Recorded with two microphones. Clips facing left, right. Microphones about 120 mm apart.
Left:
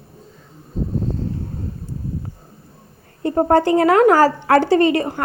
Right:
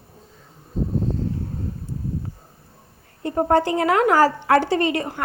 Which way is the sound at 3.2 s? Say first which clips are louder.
Left 4 dB; 45° left (ahead or behind).